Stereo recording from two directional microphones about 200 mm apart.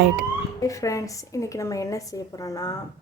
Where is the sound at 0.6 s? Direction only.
15° left (ahead or behind).